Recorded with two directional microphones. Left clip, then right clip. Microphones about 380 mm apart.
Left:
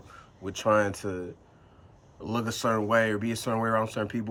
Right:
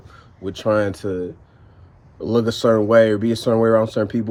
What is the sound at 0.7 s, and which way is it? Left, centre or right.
Speech, centre.